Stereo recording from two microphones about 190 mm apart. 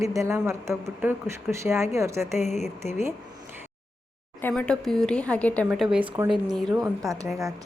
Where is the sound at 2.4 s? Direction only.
35° left (ahead or behind).